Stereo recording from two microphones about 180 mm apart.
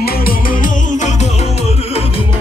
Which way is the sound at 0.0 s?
55° left (ahead or behind).